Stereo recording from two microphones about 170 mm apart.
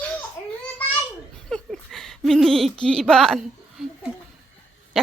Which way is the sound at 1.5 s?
Centre (ahead or behind).